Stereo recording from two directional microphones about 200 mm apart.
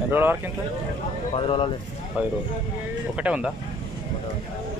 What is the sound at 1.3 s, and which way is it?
Speech, 25° left (ahead or behind).